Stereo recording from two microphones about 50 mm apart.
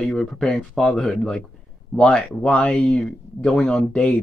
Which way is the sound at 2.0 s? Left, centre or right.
Centre.